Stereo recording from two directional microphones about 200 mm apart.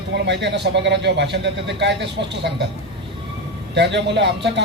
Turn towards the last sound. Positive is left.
turn(degrees=-60)  # may be behind; listen again after turning